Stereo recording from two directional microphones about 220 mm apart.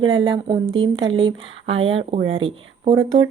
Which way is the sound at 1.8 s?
60° right (ahead or behind).